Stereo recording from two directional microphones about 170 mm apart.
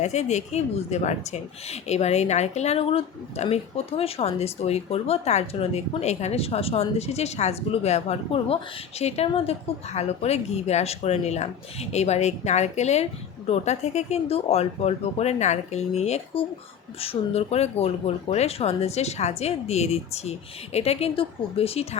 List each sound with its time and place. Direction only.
0.0 s a woman's voice: 40° left (ahead or behind)